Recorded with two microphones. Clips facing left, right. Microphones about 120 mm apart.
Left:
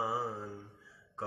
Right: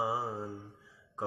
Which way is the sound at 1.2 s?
15° right (ahead or behind).